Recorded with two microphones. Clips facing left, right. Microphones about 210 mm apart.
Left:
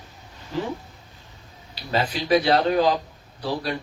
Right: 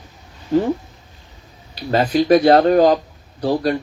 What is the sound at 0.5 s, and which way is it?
Speech, 45° right (ahead or behind).